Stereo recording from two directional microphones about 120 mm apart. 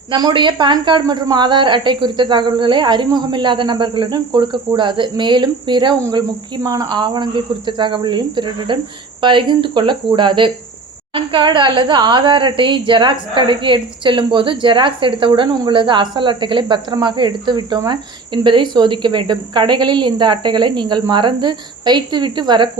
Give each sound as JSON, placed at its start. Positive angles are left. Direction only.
{"t": 0.1, "sound": "speech", "side_deg": -40}